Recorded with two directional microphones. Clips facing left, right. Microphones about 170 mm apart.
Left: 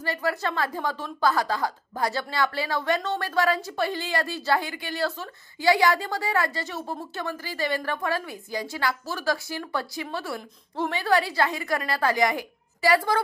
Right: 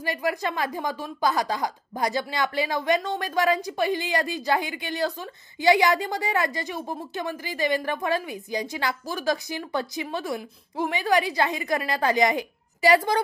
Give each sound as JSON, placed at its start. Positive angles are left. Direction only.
{"t": 0.0, "sound": "a woman's voice", "side_deg": -15}